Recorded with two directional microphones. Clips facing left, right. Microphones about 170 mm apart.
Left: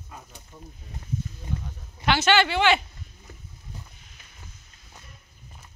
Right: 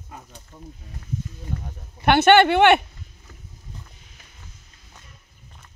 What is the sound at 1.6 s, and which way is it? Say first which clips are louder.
Speech: right 7 dB; 55° right (ahead or behind).